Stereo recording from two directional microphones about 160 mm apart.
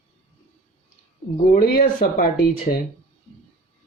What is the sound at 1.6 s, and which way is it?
Speech, 65° left (ahead or behind).